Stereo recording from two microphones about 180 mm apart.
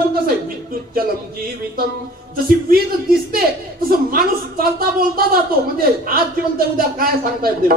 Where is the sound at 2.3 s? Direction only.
55° right (ahead or behind).